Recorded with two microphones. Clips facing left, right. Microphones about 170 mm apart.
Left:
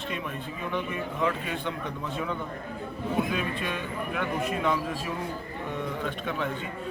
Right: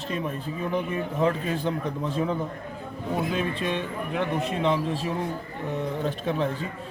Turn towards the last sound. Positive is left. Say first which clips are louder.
# right 4 dB
turn(degrees=-30)  # may be behind; listen again after turning